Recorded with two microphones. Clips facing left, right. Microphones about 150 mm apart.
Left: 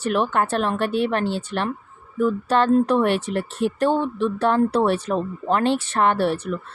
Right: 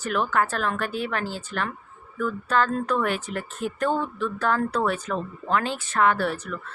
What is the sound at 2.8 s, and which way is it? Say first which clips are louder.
Speech: left 6 dB; 70° left (ahead or behind).